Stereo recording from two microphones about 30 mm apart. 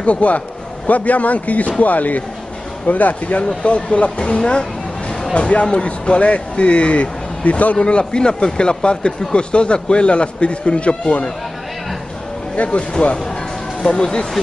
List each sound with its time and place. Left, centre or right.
0.0 s a man's voice: left
5.3 s speech: left
7.7 s speech: left
12.6 s a man's voice: left
13.0 s speech: left